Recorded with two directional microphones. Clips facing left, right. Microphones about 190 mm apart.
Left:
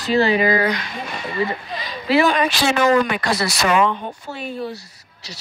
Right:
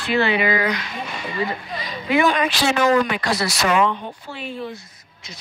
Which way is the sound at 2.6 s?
55° left (ahead or behind).